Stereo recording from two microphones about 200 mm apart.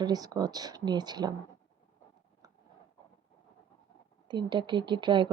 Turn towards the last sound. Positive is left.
turn(degrees=-25)  # may be behind; listen again after turning